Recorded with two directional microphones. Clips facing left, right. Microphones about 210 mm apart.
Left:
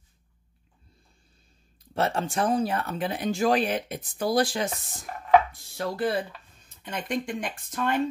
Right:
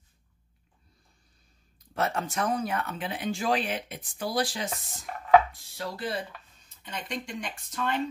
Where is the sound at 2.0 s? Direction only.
30° left (ahead or behind); by 4.6 s 50° left (ahead or behind).